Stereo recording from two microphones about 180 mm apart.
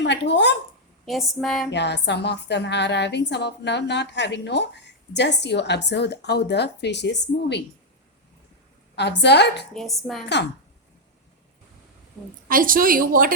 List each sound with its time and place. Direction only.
0.0 s speech: 75° left (ahead or behind)
1.0 s speech: centre (ahead or behind)
1.7 s a woman's voice: 70° left (ahead or behind)
9.0 s a woman's voice: 70° left (ahead or behind)
9.7 s speech: centre (ahead or behind)
12.5 s a woman's voice: 50° right (ahead or behind)